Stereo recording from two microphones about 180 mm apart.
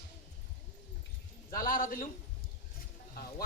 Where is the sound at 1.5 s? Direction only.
50° left (ahead or behind).